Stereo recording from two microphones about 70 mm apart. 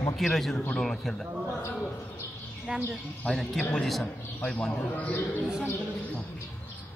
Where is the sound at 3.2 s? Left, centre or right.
Centre.